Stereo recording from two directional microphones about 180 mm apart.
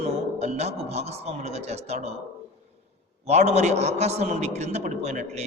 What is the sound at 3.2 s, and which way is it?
A man's voice, 35° right (ahead or behind).